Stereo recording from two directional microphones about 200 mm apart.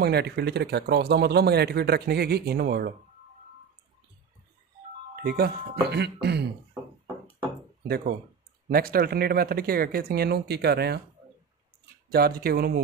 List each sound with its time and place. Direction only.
0.0 s speech: 55° right (ahead or behind)
5.1 s speech: 50° right (ahead or behind)
8.6 s speech: 50° right (ahead or behind)
12.1 s speech: 50° right (ahead or behind)